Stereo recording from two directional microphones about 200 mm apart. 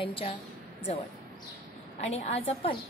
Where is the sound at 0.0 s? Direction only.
25° left (ahead or behind).